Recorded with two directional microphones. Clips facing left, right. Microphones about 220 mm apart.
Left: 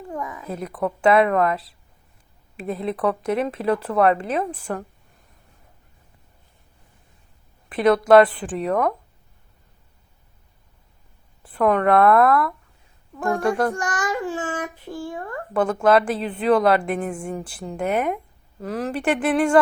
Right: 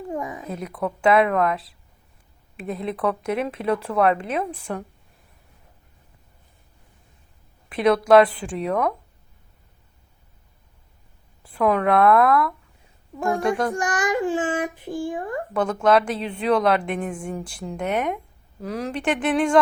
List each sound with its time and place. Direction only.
0.1 s a sound: 25° right (ahead or behind)
0.4 s speech: centre (ahead or behind)
7.7 s speech: centre (ahead or behind)
11.4 s a child's voice: centre (ahead or behind)
15.5 s speech: 5° left (ahead or behind)